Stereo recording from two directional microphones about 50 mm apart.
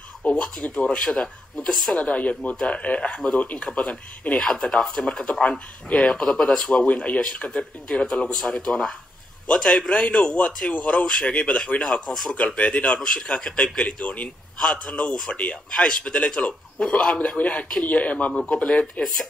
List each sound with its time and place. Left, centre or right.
0.4 s a man's voice: left
6.1 s speech: centre
6.9 s a man's voice: left
8.1 s a man's voice: centre; by 14.3 s left
14.6 s a man's voice: centre